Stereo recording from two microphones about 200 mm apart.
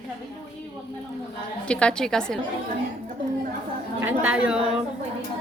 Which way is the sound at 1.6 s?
5° left (ahead or behind).